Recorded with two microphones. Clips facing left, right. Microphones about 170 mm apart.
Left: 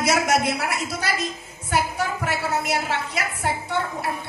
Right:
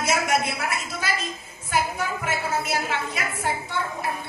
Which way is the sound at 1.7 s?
70° left (ahead or behind).